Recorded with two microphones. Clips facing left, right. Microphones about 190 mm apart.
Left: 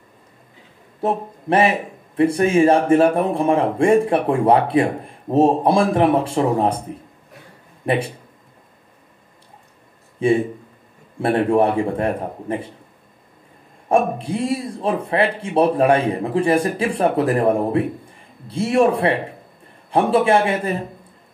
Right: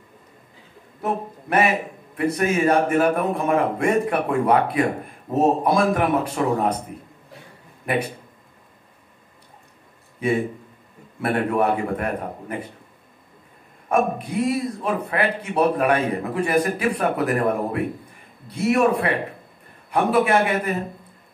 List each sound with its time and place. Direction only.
1.0 s speech: 30° left (ahead or behind)
7.8 s speech: 30° left (ahead or behind)
10.2 s speech: 30° left (ahead or behind)
13.8 s speech: 30° left (ahead or behind)